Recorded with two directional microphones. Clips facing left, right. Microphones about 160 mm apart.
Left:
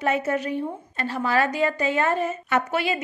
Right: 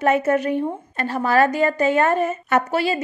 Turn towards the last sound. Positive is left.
turn(degrees=-35)  # may be behind; listen again after turning